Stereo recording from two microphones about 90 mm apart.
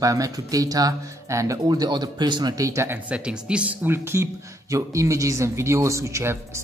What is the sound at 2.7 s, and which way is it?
Speech, 35° right (ahead or behind).